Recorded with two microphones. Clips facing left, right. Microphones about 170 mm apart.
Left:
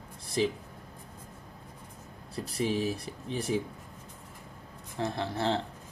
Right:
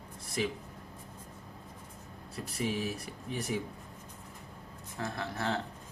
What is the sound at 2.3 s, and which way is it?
Speech, 30° left (ahead or behind).